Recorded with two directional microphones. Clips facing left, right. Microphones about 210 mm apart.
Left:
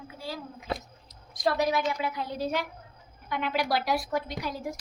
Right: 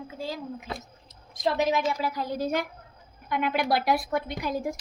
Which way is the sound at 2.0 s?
40° right (ahead or behind).